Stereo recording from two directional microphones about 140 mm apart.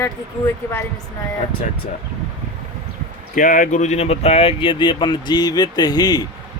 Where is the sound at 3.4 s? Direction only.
70° left (ahead or behind); by 6.3 s 30° left (ahead or behind).